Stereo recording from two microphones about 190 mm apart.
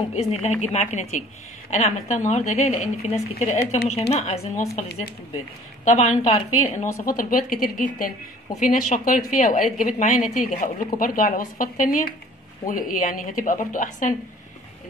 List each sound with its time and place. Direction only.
0.1 s a woman's voice: 35° left (ahead or behind)
5.9 s a woman's voice: 35° left (ahead or behind)
7.1 s speech: 45° left (ahead or behind)